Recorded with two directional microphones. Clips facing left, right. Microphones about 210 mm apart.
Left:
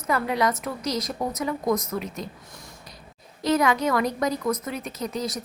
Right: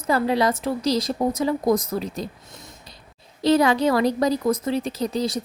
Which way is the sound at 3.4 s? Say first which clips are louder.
Right 4 dB; 30° right (ahead or behind).